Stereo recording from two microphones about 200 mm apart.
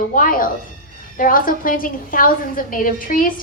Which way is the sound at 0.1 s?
45° left (ahead or behind).